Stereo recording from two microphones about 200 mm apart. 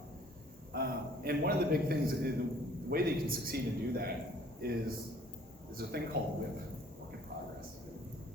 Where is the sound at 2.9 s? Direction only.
50° right (ahead or behind).